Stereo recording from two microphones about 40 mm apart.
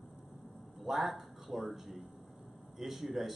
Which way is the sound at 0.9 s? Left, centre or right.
Centre.